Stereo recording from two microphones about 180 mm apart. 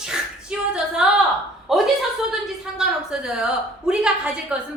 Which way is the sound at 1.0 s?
5° right (ahead or behind).